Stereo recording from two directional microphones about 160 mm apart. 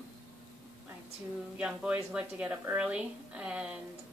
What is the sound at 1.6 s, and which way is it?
A woman's voice, 5° right (ahead or behind).